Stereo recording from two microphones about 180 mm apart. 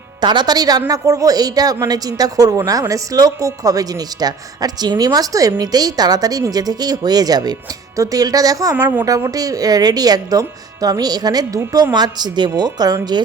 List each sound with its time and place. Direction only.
0.2 s a woman's voice: 25° right (ahead or behind)
8.7 s a woman's voice: 10° right (ahead or behind)